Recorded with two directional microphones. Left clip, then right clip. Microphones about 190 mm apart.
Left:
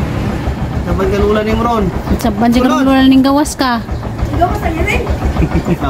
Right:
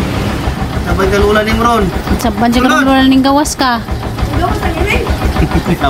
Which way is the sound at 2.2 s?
5° left (ahead or behind).